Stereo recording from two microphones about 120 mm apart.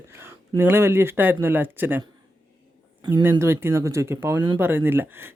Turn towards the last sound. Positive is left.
turn(degrees=-20)  # may be behind; listen again after turning